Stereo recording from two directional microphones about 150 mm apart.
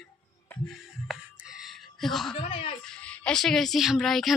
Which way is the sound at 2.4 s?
40° left (ahead or behind).